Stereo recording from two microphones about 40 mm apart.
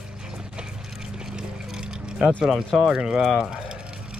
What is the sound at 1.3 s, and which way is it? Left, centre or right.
Vehicle, right.